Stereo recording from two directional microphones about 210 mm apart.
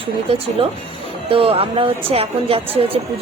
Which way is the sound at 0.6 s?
25° right (ahead or behind).